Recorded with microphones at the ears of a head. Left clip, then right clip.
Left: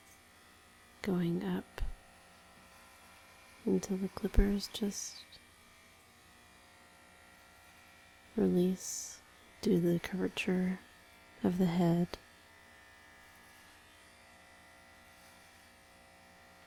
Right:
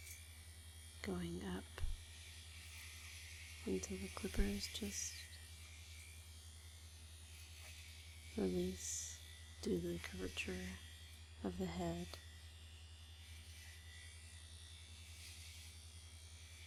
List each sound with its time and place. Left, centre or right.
1.0 s speech: left
3.6 s speech: left
8.4 s speech: left